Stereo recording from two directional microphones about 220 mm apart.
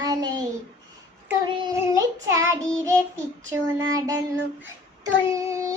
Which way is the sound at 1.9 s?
15° right (ahead or behind).